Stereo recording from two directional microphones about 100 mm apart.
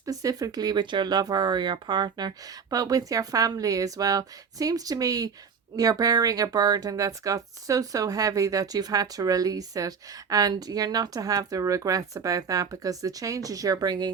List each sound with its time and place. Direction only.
0.0 s speech: 35° right (ahead or behind)